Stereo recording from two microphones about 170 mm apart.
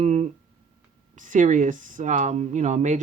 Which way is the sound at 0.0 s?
45° right (ahead or behind).